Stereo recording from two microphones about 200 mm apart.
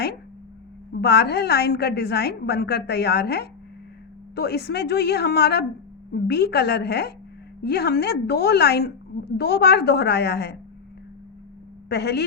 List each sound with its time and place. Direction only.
0.9 s a woman's voice: 55° left (ahead or behind)
11.9 s a woman's voice: 55° left (ahead or behind)